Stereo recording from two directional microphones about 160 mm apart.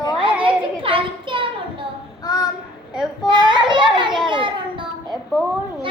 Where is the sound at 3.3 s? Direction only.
30° right (ahead or behind).